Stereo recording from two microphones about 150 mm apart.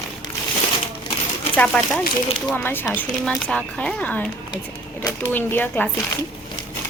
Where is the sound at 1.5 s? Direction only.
5° left (ahead or behind).